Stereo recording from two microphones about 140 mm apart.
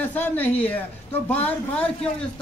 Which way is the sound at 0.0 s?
10° left (ahead or behind).